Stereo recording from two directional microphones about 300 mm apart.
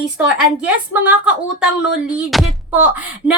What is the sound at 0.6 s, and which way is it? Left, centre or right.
A woman's voice, centre.